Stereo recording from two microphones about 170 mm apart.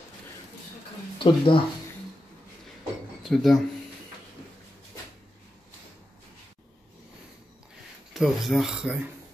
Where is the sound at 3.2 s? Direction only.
Centre (ahead or behind).